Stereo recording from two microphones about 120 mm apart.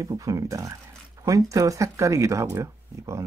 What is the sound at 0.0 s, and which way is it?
Speech, 30° right (ahead or behind).